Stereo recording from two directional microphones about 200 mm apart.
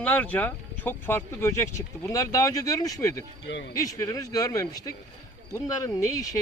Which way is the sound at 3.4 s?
65° left (ahead or behind).